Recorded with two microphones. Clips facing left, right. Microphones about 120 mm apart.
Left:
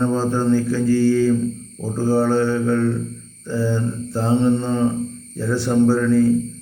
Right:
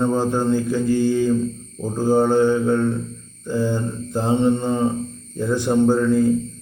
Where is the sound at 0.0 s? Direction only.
15° right (ahead or behind).